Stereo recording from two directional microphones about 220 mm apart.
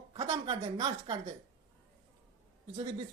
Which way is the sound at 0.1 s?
25° right (ahead or behind).